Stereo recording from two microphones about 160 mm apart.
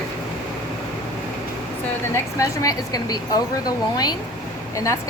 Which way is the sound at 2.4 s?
20° left (ahead or behind).